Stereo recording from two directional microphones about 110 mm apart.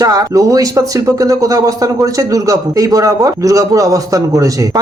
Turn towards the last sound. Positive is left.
turn(degrees=-30)  # may be behind; listen again after turning